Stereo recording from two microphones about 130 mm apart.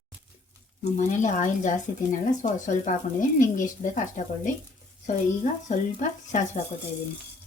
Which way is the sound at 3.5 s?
85° left.